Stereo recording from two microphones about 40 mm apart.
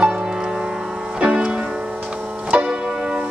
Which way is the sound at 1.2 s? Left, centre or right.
Right.